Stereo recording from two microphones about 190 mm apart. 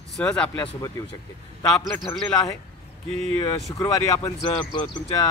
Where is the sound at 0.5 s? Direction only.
20° left (ahead or behind).